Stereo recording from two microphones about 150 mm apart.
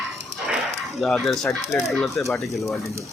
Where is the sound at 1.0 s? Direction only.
Centre (ahead or behind).